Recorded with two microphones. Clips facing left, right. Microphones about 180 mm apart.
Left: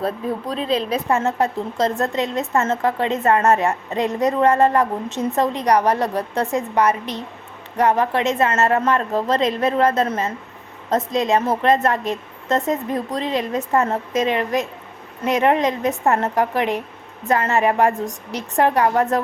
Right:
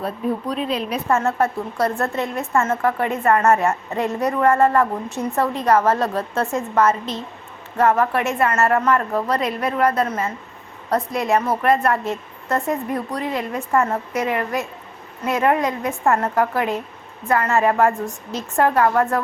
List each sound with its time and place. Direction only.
0.5 s a woman's voice: 30° left (ahead or behind)
1.0 s a woman's voice: 15° left (ahead or behind)